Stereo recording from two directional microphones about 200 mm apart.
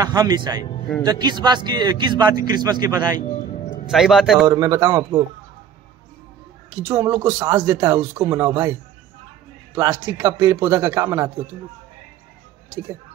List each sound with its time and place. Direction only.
0.0 s speech: 20° right (ahead or behind)
3.8 s speech: centre (ahead or behind)
4.5 s speech: 15° right (ahead or behind)
6.7 s speech: 15° right (ahead or behind)
9.8 s speech: 15° right (ahead or behind)